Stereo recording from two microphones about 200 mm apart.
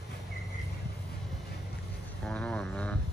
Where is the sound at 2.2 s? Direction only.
5° left (ahead or behind).